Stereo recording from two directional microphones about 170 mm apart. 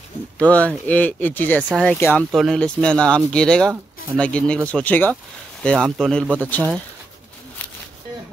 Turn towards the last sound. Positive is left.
turn(degrees=10)  # may be behind; listen again after turning